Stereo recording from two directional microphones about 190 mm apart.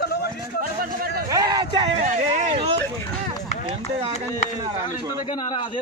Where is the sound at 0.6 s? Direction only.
50° right (ahead or behind).